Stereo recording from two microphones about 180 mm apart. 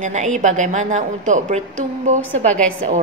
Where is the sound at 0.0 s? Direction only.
40° right (ahead or behind).